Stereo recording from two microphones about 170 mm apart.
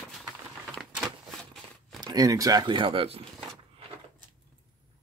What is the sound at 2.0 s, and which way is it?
Speech, 20° right (ahead or behind).